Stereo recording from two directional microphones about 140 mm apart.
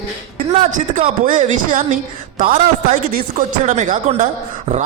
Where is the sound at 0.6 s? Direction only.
60° right (ahead or behind).